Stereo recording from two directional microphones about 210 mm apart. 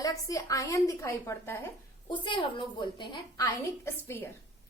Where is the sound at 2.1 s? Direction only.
25° left (ahead or behind).